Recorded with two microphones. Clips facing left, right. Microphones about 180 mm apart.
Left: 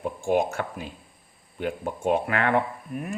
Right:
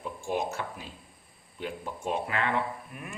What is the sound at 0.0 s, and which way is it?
Speech, 55° left (ahead or behind).